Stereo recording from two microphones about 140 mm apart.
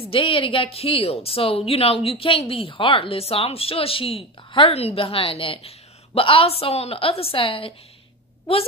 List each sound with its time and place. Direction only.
0.0 s a woman's voice: 40° left (ahead or behind)